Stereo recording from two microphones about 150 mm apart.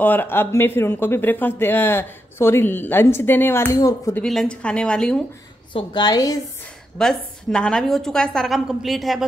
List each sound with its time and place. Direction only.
0.0 s speech: 10° left (ahead or behind)
4.2 s speech: 5° left (ahead or behind)
5.7 s a woman's voice: 30° left (ahead or behind)
7.0 s a woman's voice: 5° left (ahead or behind)